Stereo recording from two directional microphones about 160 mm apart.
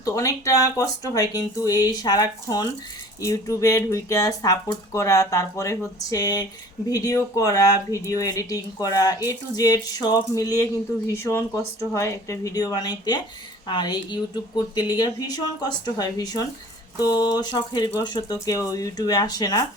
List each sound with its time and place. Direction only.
0.0 s speech: 20° left (ahead or behind)